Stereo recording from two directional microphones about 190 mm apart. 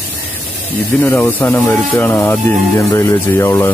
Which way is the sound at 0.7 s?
10° left (ahead or behind).